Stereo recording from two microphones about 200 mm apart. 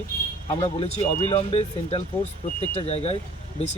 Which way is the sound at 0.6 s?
30° left (ahead or behind).